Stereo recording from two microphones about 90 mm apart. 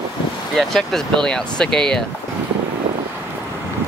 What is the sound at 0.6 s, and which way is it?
Speech, 5° left (ahead or behind).